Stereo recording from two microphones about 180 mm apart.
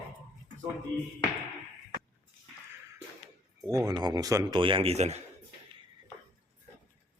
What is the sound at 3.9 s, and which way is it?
Speech, 20° right (ahead or behind).